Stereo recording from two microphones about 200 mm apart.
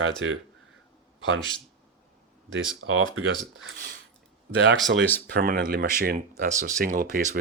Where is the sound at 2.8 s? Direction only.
75° right (ahead or behind).